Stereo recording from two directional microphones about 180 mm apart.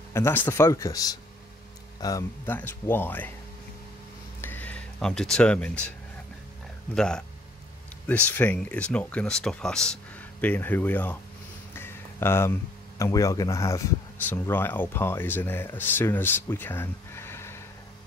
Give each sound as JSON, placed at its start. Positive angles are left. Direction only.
{"t": 0.1, "sound": "speech", "side_deg": 15}
{"t": 4.4, "sound": "a sound", "side_deg": 10}
{"t": 7.0, "sound": "speech", "side_deg": 5}
{"t": 8.3, "sound": "speech", "side_deg": 10}
{"t": 11.7, "sound": "a sound", "side_deg": 15}
{"t": 13.0, "sound": "speech", "side_deg": 20}